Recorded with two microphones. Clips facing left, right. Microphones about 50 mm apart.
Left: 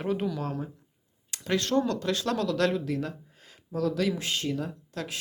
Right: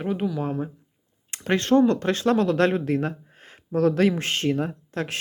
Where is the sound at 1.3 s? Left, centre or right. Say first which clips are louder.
Right 6 dB; right.